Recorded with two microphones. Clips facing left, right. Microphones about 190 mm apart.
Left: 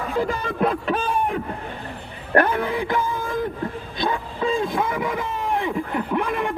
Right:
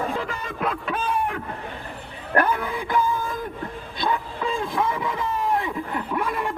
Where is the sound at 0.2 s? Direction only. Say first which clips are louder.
Left 7 dB; 35° left (ahead or behind).